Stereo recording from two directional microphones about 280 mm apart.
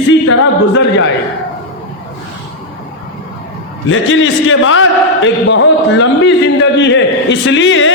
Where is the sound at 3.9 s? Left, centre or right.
Left.